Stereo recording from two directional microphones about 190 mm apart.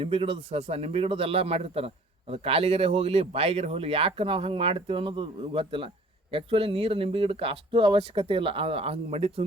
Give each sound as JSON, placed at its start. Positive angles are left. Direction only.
{"t": 0.0, "sound": "speech", "side_deg": -30}